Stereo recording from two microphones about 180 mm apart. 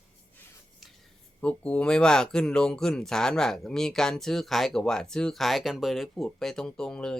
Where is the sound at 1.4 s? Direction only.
5° left (ahead or behind).